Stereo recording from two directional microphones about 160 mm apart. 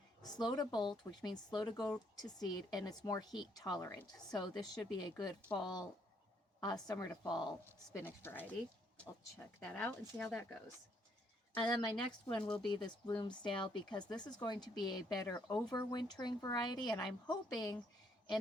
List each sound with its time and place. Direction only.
0.2 s a woman's voice: 25° left (ahead or behind)
7.9 s speech: 15° left (ahead or behind)
9.6 s speech: 10° left (ahead or behind)
11.5 s a woman's voice: 25° left (ahead or behind)
12.4 s speech: 5° left (ahead or behind)
12.6 s a woman's voice: 25° left (ahead or behind)